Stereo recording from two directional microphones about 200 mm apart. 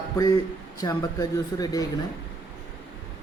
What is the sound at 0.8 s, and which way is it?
Speech, 20° left (ahead or behind).